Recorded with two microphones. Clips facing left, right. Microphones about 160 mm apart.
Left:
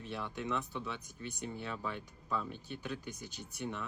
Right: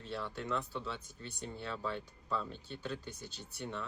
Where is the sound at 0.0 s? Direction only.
15° left (ahead or behind).